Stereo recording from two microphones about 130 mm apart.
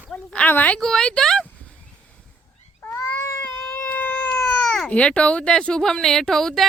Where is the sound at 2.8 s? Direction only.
20° left (ahead or behind).